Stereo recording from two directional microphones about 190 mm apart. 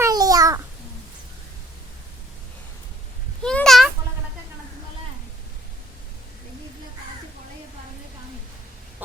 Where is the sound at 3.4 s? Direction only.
5° left (ahead or behind).